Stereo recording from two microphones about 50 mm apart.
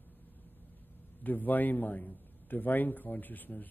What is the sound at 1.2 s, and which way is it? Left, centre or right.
A man's voice, left.